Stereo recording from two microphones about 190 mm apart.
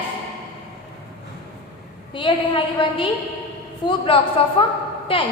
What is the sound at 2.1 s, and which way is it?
A woman's voice, 25° left (ahead or behind).